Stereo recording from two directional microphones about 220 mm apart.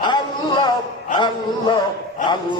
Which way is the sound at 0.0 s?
20° left (ahead or behind).